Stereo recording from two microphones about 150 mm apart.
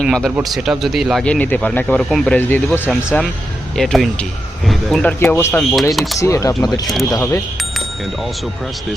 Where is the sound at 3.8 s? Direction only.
Centre (ahead or behind).